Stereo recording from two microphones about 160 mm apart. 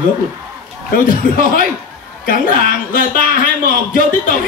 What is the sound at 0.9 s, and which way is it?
Speech, 60° left (ahead or behind).